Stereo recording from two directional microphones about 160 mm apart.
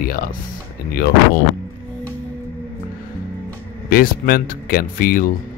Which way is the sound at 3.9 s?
65° left (ahead or behind).